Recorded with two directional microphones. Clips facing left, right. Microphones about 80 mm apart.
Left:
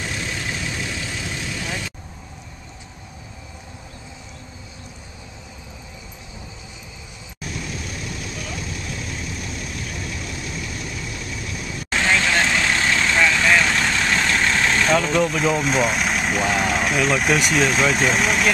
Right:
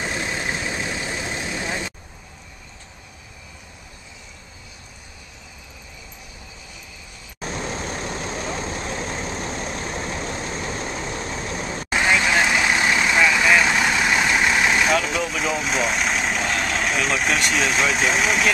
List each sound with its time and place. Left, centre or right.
0.0 s vehicle: right
7.3 s vehicle: right
11.9 s vehicle: centre